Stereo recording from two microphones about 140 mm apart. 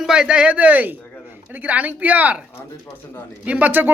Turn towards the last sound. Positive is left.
turn(degrees=-10)  # may be behind; listen again after turning